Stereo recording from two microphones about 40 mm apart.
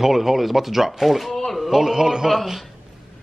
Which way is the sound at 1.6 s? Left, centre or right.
Centre.